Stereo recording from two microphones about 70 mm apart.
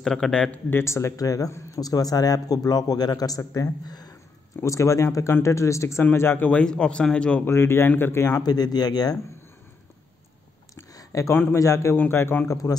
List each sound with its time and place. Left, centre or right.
0.0 s speech: centre
0.7 s speech: left
1.7 s a man's voice: left
3.8 s speech: left
4.6 s speech: left
6.1 s speech: left
6.5 s speech: centre
7.4 s speech: left
8.4 s speech: left
11.0 s a sound: left
11.5 s speech: left
11.9 s speech: left
12.4 s a man's voice: left